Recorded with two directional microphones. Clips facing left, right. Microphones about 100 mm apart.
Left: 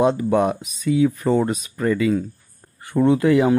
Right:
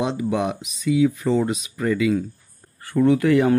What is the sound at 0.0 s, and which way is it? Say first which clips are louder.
Speech: left 5 dB; 45° left (ahead or behind).